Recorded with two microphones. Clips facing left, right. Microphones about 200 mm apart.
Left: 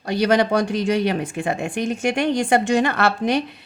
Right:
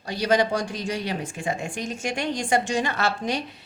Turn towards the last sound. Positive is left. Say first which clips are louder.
# left 6 dB
turn(degrees=60)  # may be behind; listen again after turning